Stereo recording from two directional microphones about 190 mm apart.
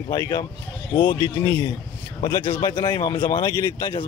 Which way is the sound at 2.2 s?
35° left (ahead or behind).